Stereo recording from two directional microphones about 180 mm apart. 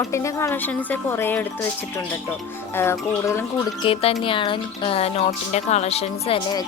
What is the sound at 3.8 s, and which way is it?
Speech, 30° left (ahead or behind).